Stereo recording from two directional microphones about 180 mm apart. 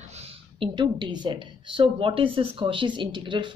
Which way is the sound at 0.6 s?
25° right (ahead or behind).